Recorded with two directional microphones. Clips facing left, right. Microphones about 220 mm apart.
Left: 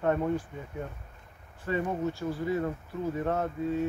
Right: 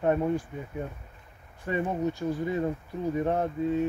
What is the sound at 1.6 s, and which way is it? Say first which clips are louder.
Speech: right 1 dB; 15° right (ahead or behind).